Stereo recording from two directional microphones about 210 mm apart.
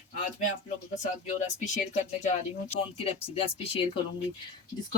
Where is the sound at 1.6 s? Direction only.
35° left (ahead or behind).